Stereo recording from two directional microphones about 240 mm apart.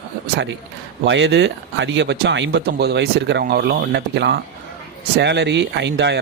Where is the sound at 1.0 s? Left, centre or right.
Right.